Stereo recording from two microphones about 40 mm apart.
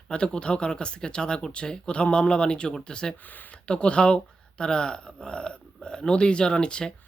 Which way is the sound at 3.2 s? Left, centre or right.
Left.